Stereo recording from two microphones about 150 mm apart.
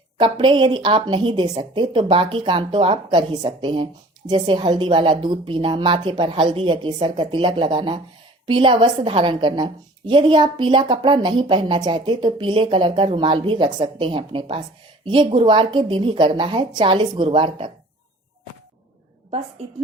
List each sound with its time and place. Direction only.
0.2 s a woman's voice: 30° right (ahead or behind)